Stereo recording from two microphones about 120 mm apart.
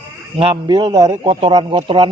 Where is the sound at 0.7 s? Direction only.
35° right (ahead or behind).